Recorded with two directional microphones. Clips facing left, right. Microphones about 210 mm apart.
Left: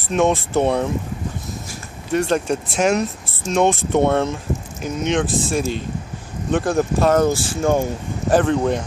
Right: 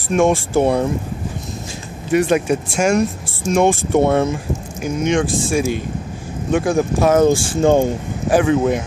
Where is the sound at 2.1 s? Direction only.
10° right (ahead or behind).